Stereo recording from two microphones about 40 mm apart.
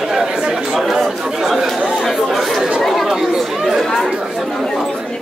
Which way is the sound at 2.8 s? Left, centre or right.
Centre.